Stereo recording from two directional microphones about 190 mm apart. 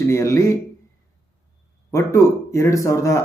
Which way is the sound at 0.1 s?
15° left (ahead or behind).